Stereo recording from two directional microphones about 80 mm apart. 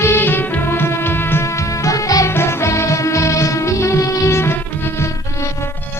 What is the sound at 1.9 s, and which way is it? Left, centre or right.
Music, left.